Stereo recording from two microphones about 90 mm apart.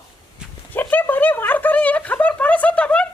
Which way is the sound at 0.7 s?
20° left (ahead or behind).